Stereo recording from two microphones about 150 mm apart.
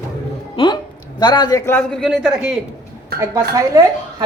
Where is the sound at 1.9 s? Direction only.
Centre (ahead or behind).